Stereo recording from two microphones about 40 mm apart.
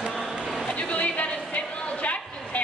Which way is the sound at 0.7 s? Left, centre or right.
Left.